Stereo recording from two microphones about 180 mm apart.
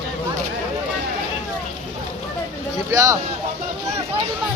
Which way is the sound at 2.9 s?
15° right (ahead or behind).